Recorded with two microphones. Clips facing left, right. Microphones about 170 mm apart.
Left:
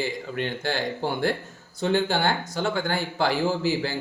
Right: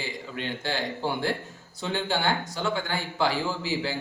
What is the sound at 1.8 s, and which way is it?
Speech, 50° left (ahead or behind).